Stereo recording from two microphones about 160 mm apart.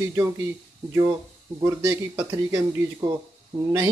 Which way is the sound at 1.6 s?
20° right (ahead or behind).